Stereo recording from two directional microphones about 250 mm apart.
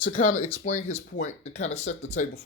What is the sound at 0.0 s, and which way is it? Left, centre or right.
Speech, left.